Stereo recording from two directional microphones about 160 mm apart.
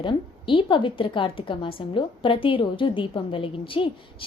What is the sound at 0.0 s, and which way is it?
A woman's voice, 30° left (ahead or behind).